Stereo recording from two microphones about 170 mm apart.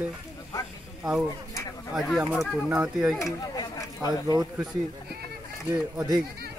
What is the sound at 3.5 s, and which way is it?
Chatter, 25° left (ahead or behind).